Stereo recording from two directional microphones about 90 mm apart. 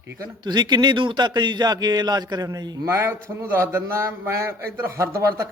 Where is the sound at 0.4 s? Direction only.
55° right (ahead or behind).